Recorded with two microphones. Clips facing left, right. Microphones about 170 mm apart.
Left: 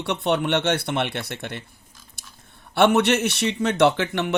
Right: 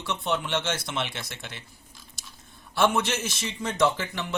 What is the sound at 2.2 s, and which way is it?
Chewing, 55° left (ahead or behind).